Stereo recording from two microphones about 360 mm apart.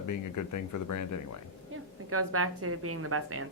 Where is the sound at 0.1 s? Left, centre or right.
Left.